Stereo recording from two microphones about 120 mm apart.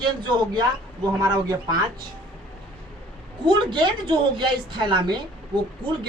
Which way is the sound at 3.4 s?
40° right (ahead or behind).